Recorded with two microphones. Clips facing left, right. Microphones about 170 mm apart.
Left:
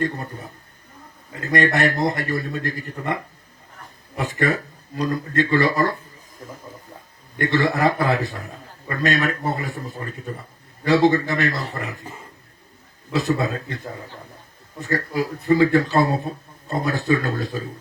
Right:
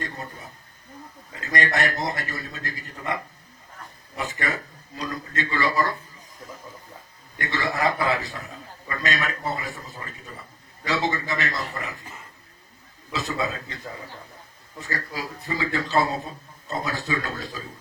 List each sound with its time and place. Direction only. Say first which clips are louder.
0.0 s a man's voice: left 9 dB; 55° left (ahead or behind)
4.2 s a man's voice: left 7 dB; 55° left (ahead or behind)
7.3 s a man's voice: left 7 dB; 55° left (ahead or behind)
13.1 s a man's voice: left 6 dB; 55° left (ahead or behind)
14.8 s a man's voice: left 9 dB; 55° left (ahead or behind)